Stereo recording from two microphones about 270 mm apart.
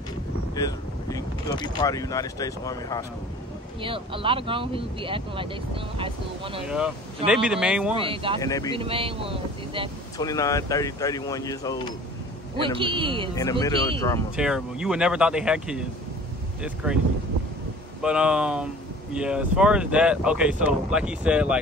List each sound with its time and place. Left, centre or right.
0.6 s speech: centre
3.8 s speech: centre
7.2 s speech: centre
7.9 s speech: centre
8.4 s speech: centre
8.7 s speech: centre
10.1 s speech: centre
12.5 s speech: centre
13.3 s speech: centre
14.3 s speech: centre
18.0 s speech: centre